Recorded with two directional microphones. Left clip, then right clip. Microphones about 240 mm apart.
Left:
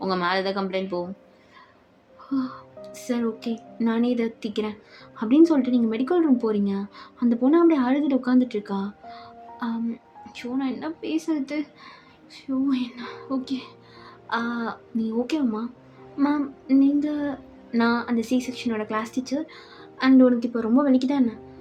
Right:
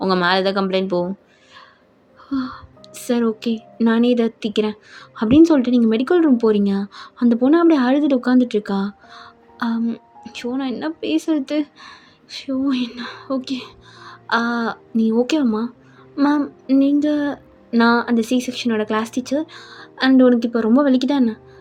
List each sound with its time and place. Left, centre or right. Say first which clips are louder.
0.0 s a woman's voice: right 7 dB; right
2.3 s a woman's voice: right 3 dB; right